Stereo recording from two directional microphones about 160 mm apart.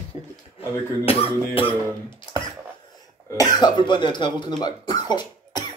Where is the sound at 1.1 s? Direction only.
35° left (ahead or behind).